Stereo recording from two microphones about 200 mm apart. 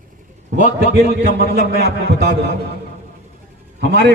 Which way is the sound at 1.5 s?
50° right (ahead or behind).